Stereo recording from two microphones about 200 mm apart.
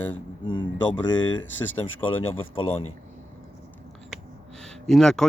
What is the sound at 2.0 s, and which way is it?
Speech, 30° left (ahead or behind).